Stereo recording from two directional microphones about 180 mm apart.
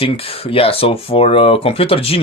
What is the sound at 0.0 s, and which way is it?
Speech, 30° left (ahead or behind).